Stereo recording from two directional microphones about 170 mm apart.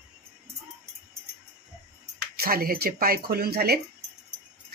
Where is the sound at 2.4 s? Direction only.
60° right (ahead or behind).